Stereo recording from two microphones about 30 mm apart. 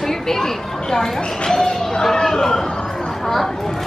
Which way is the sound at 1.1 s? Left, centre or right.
Left.